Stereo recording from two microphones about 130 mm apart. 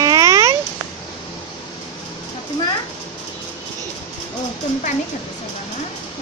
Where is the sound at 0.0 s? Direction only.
25° right (ahead or behind).